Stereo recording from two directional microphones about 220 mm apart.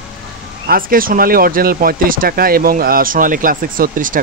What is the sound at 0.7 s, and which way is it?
Speech, 40° right (ahead or behind).